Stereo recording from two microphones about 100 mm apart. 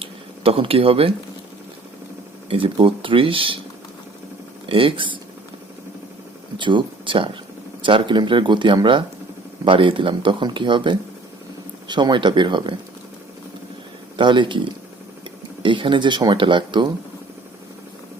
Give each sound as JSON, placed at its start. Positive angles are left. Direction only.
{"t": 0.0, "sound": "a sound", "side_deg": -65}
{"t": 2.5, "sound": "speech", "side_deg": -60}
{"t": 4.7, "sound": "speech", "side_deg": -60}
{"t": 6.6, "sound": "speech", "side_deg": -50}
{"t": 14.2, "sound": "speech", "side_deg": -50}